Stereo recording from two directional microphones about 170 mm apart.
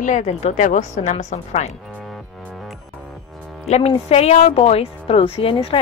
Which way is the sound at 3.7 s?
35° left (ahead or behind).